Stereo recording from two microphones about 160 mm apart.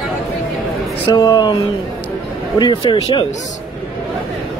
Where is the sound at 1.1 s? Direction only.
25° left (ahead or behind).